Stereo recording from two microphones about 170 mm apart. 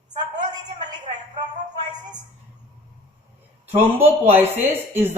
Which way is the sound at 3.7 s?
10° right (ahead or behind).